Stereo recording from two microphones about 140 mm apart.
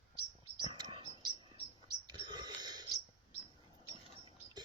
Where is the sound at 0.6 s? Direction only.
30° right (ahead or behind).